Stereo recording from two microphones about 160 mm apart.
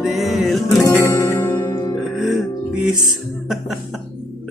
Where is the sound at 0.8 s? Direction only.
20° left (ahead or behind).